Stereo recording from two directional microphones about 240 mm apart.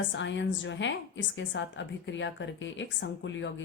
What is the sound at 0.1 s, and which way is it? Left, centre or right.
A woman's voice, left.